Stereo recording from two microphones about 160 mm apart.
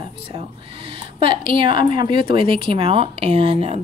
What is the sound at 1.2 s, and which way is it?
A woman's voice, 35° right (ahead or behind).